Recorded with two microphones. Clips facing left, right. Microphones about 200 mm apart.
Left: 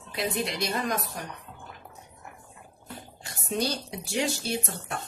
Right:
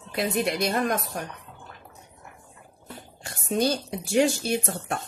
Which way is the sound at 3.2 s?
50° right (ahead or behind).